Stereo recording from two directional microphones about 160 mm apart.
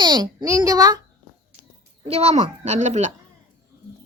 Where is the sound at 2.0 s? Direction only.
40° right (ahead or behind).